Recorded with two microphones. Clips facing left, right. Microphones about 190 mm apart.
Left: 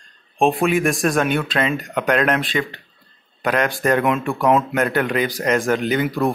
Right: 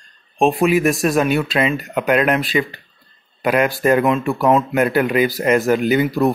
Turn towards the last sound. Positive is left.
turn(degrees=-5)  # may be behind; listen again after turning